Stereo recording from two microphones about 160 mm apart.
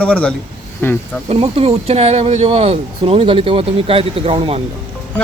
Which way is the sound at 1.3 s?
40° right (ahead or behind).